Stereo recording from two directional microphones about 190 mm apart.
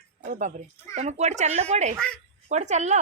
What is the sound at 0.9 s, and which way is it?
Speech, 35° right (ahead or behind).